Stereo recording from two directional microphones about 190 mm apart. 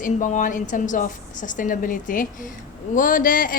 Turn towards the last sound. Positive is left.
turn(degrees=45)  # may be behind; listen again after turning